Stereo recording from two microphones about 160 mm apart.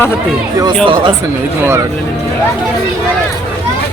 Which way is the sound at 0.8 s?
35° right (ahead or behind).